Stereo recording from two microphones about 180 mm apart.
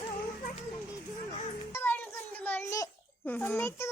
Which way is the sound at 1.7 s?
10° left (ahead or behind).